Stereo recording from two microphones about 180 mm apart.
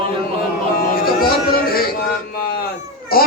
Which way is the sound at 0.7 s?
55° left (ahead or behind).